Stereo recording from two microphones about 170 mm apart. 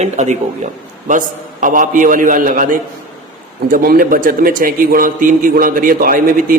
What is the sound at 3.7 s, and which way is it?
A man's voice, 55° right (ahead or behind).